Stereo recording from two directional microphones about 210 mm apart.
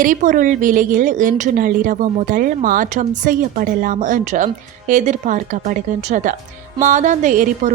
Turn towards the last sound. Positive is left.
turn(degrees=-35)  # may be behind; listen again after turning